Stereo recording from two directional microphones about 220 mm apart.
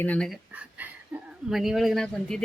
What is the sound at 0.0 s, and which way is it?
Speech, 5° left (ahead or behind).